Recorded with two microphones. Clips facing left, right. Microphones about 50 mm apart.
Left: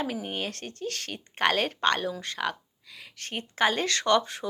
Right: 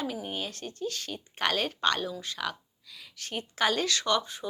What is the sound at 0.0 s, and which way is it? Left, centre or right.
A woman's voice, left.